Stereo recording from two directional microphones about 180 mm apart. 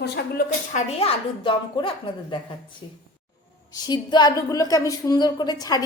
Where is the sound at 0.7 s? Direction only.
35° left (ahead or behind).